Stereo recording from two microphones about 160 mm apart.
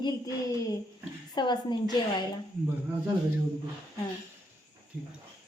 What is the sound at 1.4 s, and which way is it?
Speech, 30° left (ahead or behind).